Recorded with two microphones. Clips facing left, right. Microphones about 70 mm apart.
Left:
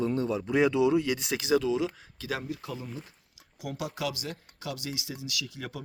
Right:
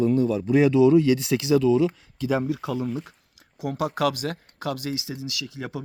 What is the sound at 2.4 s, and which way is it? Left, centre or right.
Speech, right.